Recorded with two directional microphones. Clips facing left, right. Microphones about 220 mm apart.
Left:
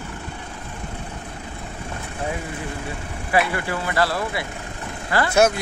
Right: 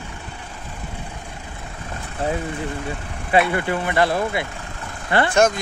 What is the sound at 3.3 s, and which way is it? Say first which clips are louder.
Speech: right 3 dB; 25° right (ahead or behind).